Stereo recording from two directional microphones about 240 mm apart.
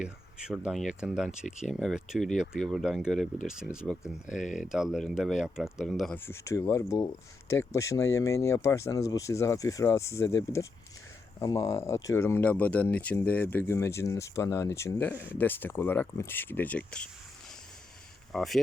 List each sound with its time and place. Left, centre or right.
0.0 s speech: centre
1.3 s speech: left
1.8 s speech: centre
4.3 s speech: left
4.5 s speech: centre
11.3 s speech: centre
18.3 s speech: centre